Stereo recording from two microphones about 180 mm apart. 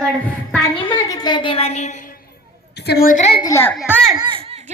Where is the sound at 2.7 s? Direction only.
65° left (ahead or behind).